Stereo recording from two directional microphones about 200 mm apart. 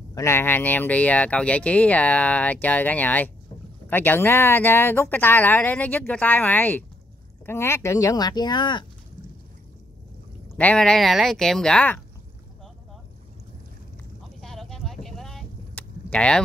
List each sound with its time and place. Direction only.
0.1 s speech: 15° left (ahead or behind)
10.5 s speech: 5° left (ahead or behind)
14.4 s vehicle: centre (ahead or behind)